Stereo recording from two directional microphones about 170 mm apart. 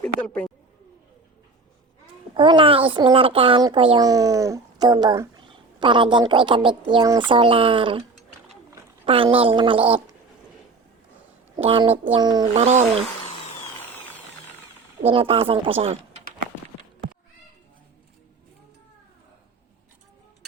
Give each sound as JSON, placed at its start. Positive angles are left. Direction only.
{"t": 0.0, "sound": "speech", "side_deg": 10}
{"t": 2.3, "sound": "a child's voice", "side_deg": -30}
{"t": 9.0, "sound": "speech", "side_deg": -30}
{"t": 11.5, "sound": "a child's voice", "side_deg": -30}
{"t": 12.5, "sound": "speech", "side_deg": -40}
{"t": 13.2, "sound": "a sound", "side_deg": 35}
{"t": 13.7, "sound": "drill", "side_deg": 10}
{"t": 15.1, "sound": "speech", "side_deg": -35}